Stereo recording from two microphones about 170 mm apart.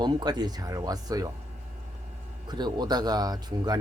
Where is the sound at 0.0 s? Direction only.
25° right (ahead or behind).